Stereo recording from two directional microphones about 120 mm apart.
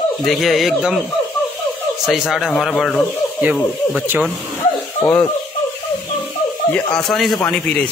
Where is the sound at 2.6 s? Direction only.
5° left (ahead or behind).